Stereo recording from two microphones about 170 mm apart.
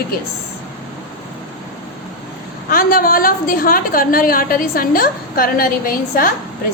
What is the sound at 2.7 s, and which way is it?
A woman's voice, 55° left (ahead or behind).